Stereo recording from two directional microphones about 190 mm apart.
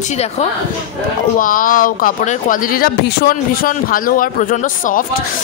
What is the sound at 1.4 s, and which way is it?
Speech, 45° left (ahead or behind).